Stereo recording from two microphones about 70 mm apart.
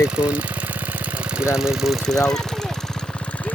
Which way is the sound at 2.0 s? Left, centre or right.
Centre.